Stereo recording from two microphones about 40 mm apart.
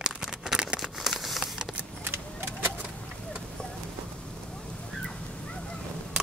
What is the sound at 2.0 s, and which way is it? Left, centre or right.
Vehicle, right.